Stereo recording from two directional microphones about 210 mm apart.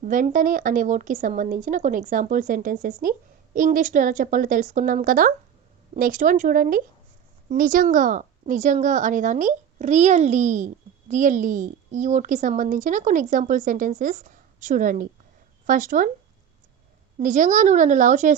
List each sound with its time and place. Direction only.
0.0 s a woman's voice: 40° right (ahead or behind)
17.2 s a woman's voice: 35° right (ahead or behind)